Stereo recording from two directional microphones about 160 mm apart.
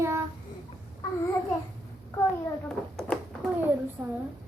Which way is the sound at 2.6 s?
5° left (ahead or behind).